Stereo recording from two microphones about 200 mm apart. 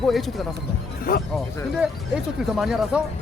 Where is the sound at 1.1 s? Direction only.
45° left (ahead or behind).